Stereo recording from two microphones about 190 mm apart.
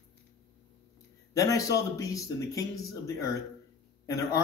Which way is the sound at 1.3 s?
15° left (ahead or behind).